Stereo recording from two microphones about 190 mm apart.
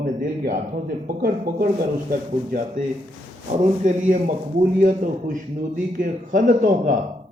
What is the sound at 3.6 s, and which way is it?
Speech, 40° right (ahead or behind).